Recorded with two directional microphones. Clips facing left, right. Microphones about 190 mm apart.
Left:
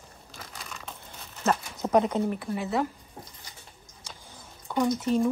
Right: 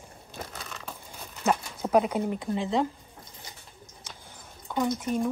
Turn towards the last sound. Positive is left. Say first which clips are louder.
# left 2 dB
turn(degrees=-5)  # may be behind; listen again after turning